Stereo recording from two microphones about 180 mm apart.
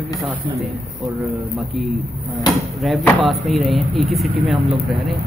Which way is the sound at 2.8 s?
Centre (ahead or behind).